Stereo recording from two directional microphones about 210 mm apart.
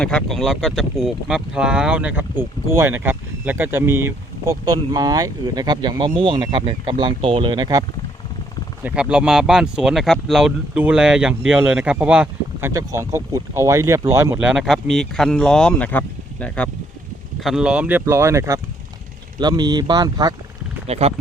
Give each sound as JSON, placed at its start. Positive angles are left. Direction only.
{"t": 0.0, "sound": "speech", "side_deg": 5}
{"t": 8.8, "sound": "speech", "side_deg": -5}
{"t": 14.5, "sound": "speech", "side_deg": 0}
{"t": 17.4, "sound": "speech", "side_deg": -5}
{"t": 20.8, "sound": "speech", "side_deg": -30}